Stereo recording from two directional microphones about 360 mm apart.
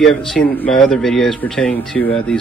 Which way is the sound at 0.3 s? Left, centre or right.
Centre.